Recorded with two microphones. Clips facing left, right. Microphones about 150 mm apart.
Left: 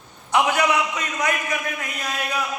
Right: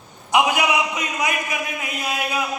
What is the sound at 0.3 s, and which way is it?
A man's voice, 15° right (ahead or behind).